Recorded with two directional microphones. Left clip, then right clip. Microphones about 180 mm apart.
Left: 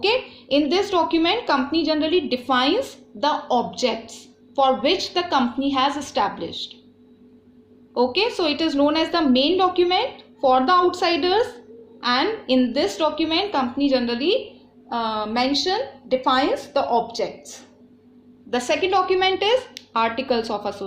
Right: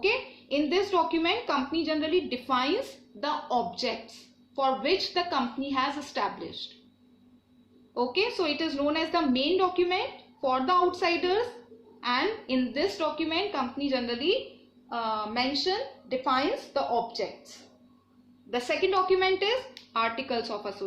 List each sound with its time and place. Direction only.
0.0 s a woman's voice: 45° left (ahead or behind)
7.9 s a woman's voice: 45° left (ahead or behind)
18.5 s a woman's voice: 45° left (ahead or behind)